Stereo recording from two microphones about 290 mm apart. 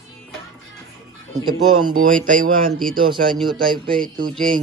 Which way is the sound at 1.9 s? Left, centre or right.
Right.